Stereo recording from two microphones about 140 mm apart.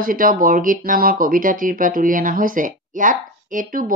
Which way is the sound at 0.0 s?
80° right.